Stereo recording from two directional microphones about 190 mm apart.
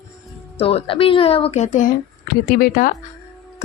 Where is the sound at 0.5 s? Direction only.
30° left (ahead or behind); by 2.9 s 50° left (ahead or behind).